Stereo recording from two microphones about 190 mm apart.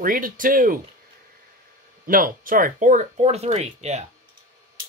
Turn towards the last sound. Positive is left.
turn(degrees=-35)  # may be behind; listen again after turning